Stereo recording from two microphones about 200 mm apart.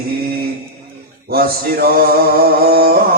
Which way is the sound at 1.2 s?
50° right (ahead or behind).